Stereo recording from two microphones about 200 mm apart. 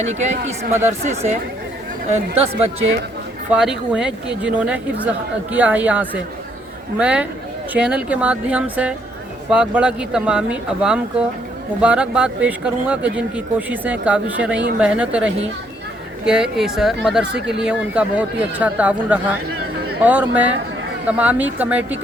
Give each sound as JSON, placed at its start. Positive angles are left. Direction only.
{"t": 0.0, "sound": "speech", "side_deg": -35}
{"t": 3.5, "sound": "speech", "side_deg": -5}